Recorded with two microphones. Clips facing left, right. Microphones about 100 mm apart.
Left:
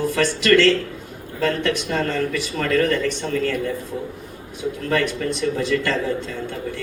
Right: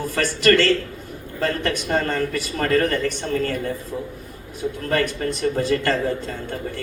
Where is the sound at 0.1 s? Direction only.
45° right (ahead or behind).